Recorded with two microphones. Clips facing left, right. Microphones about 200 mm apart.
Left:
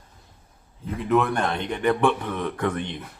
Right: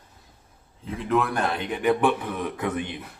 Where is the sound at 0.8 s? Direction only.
Centre (ahead or behind).